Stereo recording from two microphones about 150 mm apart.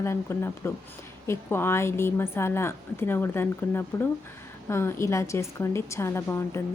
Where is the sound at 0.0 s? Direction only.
15° left (ahead or behind).